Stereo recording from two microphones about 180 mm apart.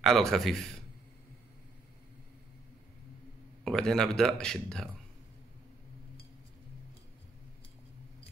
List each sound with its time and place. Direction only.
0.0 s speech: centre (ahead or behind)
3.6 s speech: 5° left (ahead or behind)